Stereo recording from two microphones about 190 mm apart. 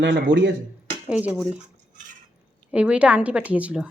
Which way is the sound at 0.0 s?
65° right (ahead or behind).